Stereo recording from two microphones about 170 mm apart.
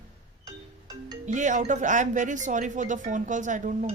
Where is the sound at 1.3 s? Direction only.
45° right (ahead or behind).